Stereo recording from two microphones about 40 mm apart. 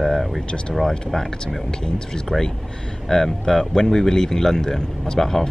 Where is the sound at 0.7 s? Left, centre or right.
Centre.